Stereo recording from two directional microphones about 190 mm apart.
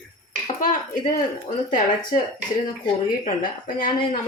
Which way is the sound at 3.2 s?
45° left (ahead or behind).